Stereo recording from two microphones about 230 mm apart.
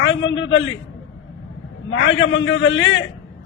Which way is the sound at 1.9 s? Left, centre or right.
Left.